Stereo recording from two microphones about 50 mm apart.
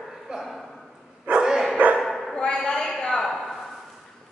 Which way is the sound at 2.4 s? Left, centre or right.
Centre.